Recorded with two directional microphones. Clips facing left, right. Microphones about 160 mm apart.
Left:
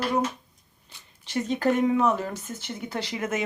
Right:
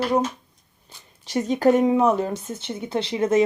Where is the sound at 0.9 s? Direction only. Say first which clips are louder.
Right 4 dB; 40° right (ahead or behind).